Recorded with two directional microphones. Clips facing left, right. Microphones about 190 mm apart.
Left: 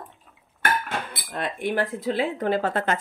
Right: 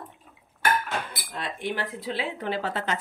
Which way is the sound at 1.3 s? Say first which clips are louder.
Left 5 dB; 55° left (ahead or behind).